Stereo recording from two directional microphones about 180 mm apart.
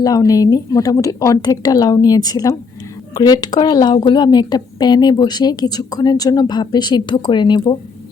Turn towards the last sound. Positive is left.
turn(degrees=25)  # may be behind; listen again after turning